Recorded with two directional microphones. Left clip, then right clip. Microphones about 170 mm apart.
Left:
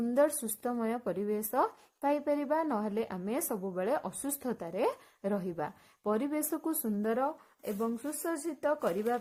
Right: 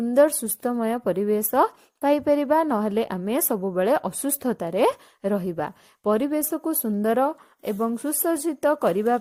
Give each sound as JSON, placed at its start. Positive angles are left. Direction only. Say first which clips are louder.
{"t": 0.1, "sound": "speech", "louder": "right 11 dB", "side_deg": -40}
{"t": 7.0, "sound": "speech", "louder": "right 11 dB", "side_deg": -50}